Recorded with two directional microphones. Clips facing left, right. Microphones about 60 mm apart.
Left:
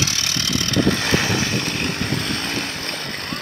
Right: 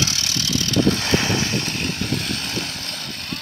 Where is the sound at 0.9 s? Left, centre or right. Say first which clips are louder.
Left 1 dB; centre.